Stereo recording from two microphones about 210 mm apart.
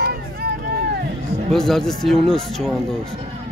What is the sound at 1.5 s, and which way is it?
Speech, centre (ahead or behind).